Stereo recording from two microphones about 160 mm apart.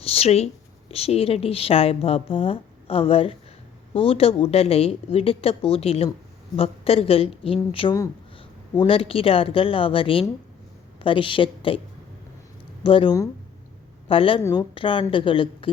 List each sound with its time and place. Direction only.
0.0 s a woman's voice: 40° left (ahead or behind)
12.8 s speech: 35° left (ahead or behind)